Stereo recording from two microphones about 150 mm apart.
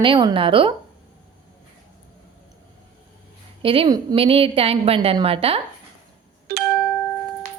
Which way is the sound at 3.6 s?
40° right (ahead or behind).